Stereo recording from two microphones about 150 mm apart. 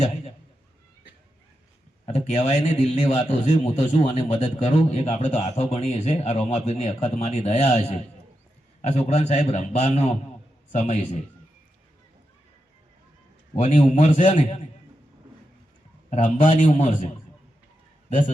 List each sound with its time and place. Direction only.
2.0 s a man's voice: 45° left (ahead or behind)
13.6 s a man's voice: 45° left (ahead or behind)
16.0 s a man's voice: 55° left (ahead or behind)